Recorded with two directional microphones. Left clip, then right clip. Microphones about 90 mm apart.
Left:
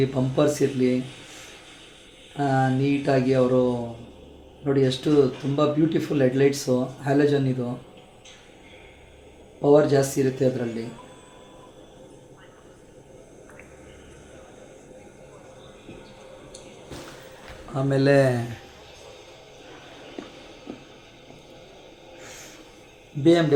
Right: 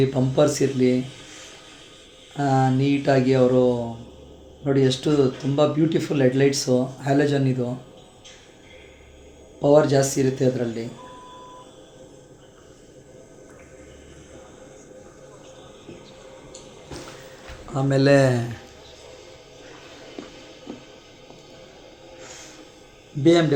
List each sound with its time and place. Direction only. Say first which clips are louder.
0.1 s speech: right 3 dB; 55° right (ahead or behind)
2.3 s speech: right 2 dB; 55° right (ahead or behind)
9.6 s speech: right 1 dB; 55° right (ahead or behind)
17.7 s speech: right 2 dB; 45° right (ahead or behind)
23.2 s speech: right 1 dB; 25° right (ahead or behind)